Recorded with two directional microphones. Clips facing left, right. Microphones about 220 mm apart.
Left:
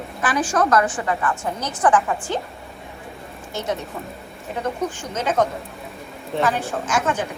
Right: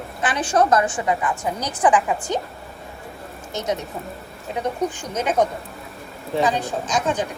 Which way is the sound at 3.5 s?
20° right (ahead or behind).